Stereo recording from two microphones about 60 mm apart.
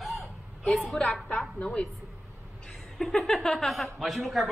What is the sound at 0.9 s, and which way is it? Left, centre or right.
Speech, centre.